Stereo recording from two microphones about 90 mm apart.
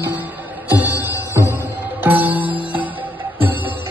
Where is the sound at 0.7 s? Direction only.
20° right (ahead or behind).